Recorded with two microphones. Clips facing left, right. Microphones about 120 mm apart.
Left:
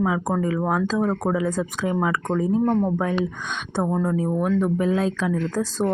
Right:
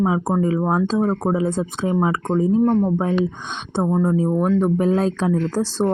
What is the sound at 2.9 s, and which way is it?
Speech, 30° right (ahead or behind).